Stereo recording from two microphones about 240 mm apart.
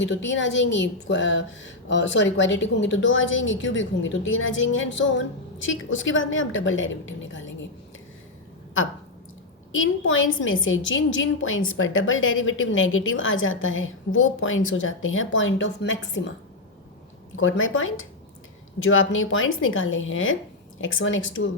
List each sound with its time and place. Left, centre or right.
0.0 s a woman's voice: left
9.7 s a woman's voice: left
17.3 s a woman's voice: left